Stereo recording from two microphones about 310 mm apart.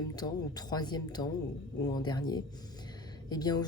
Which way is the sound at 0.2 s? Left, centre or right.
Centre.